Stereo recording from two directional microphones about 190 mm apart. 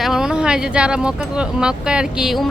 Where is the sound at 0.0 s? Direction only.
Centre (ahead or behind).